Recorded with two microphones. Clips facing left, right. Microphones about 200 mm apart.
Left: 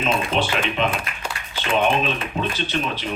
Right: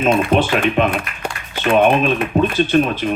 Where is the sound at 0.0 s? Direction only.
55° right (ahead or behind).